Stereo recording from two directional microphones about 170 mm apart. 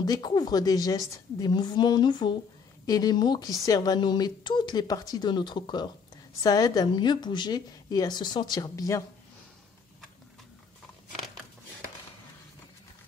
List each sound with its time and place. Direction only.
0.0 s a woman's voice: 25° left (ahead or behind)